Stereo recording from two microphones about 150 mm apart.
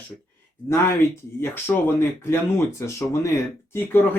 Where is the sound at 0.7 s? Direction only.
15° left (ahead or behind).